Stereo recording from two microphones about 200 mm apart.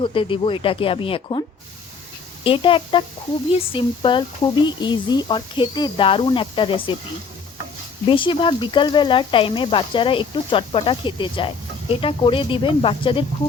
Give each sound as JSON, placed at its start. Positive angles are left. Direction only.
{"t": 0.0, "sound": "speech", "side_deg": 25}
{"t": 8.0, "sound": "speech", "side_deg": 25}